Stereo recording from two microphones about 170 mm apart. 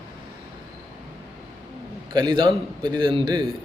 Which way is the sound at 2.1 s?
30° right (ahead or behind).